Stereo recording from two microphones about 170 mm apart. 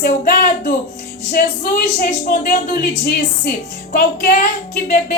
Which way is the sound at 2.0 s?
55° left (ahead or behind).